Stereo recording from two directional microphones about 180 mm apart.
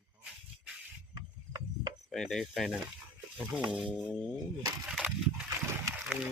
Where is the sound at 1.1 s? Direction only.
20° right (ahead or behind).